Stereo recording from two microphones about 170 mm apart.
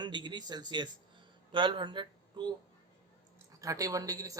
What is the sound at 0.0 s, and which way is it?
Speech, 25° right (ahead or behind).